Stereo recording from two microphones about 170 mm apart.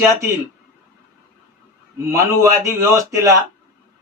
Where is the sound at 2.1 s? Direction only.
15° right (ahead or behind).